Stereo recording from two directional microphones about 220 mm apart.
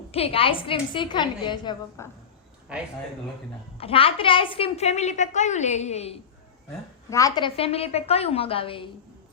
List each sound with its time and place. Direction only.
0.1 s a woman's voice: 25° left (ahead or behind)
3.8 s a woman's voice: 25° left (ahead or behind)
7.1 s a woman's voice: 15° left (ahead or behind)